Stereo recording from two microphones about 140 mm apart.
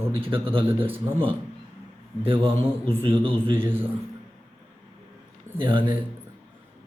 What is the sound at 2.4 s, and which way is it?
Speech, 40° right (ahead or behind).